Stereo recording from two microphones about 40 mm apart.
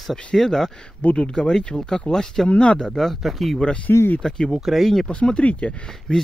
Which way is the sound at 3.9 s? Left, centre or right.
Left.